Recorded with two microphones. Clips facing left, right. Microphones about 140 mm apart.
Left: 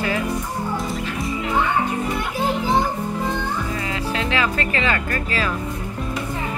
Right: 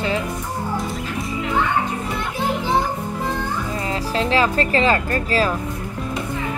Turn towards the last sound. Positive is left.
turn(degrees=-35)  # may be behind; listen again after turning